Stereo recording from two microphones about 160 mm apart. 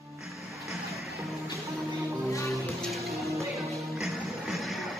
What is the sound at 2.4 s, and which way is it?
Music, centre (ahead or behind).